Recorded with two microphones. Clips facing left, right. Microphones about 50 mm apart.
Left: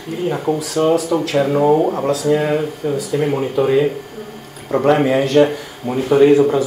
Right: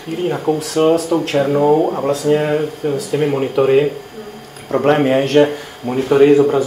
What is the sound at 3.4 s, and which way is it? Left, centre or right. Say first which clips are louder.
Speech: right 3 dB; right.